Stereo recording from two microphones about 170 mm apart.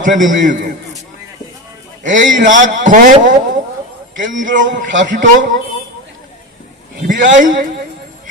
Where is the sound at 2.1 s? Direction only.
50° right (ahead or behind).